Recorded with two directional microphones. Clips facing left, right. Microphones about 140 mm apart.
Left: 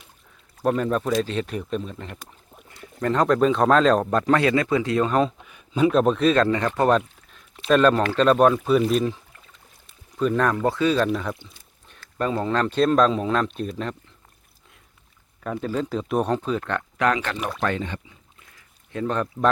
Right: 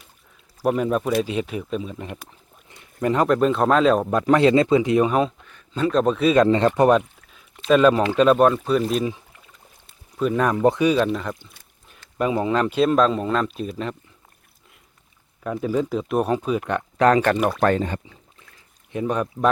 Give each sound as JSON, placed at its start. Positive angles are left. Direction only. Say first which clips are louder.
{"t": 0.6, "sound": "speech", "louder": "right 1 dB", "side_deg": -10}
{"t": 2.6, "sound": "a sound", "louder": "right 2 dB", "side_deg": -20}
{"t": 3.1, "sound": "speech", "louder": "even", "side_deg": -5}
{"t": 5.5, "sound": "speech", "louder": "left 3 dB", "side_deg": 10}
{"t": 6.5, "sound": "speech", "louder": "right 4 dB", "side_deg": -20}
{"t": 10.2, "sound": "speech", "louder": "right 1 dB", "side_deg": -5}
{"t": 10.6, "sound": "speech", "louder": "right 3 dB", "side_deg": -20}
{"t": 12.1, "sound": "speech", "louder": "right 2 dB", "side_deg": -10}
{"t": 15.4, "sound": "speech", "louder": "right 3 dB", "side_deg": -5}
{"t": 17.0, "sound": "speech", "louder": "right 7 dB", "side_deg": -40}
{"t": 18.9, "sound": "speech", "louder": "right 2 dB", "side_deg": -15}